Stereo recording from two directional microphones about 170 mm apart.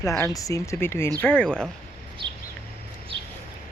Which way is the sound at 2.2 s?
30° right (ahead or behind).